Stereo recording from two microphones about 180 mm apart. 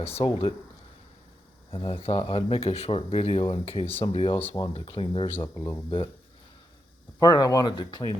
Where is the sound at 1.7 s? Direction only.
30° left (ahead or behind).